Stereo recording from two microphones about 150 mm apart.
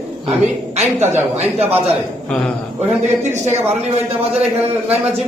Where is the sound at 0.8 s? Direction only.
50° right (ahead or behind).